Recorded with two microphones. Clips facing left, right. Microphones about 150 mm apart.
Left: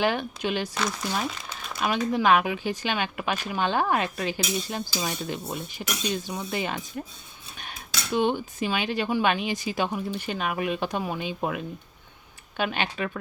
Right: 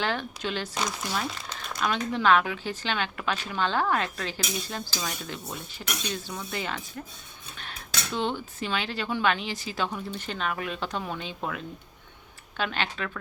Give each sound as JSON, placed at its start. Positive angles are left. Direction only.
{"t": 0.0, "sound": "speech", "side_deg": 15}